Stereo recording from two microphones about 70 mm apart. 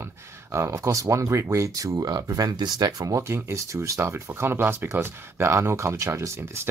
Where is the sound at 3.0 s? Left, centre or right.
Right.